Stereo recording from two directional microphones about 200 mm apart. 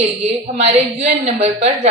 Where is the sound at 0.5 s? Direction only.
35° right (ahead or behind).